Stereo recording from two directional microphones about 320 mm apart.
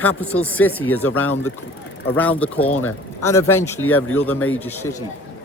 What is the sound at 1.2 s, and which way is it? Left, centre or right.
Speech, left.